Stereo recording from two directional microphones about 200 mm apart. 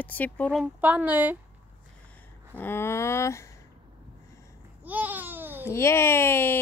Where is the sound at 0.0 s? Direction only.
10° left (ahead or behind).